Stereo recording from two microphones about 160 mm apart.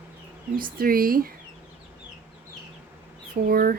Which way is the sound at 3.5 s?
65° right (ahead or behind).